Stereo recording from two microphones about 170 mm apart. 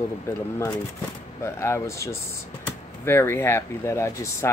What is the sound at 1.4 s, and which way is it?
Speech, 15° left (ahead or behind).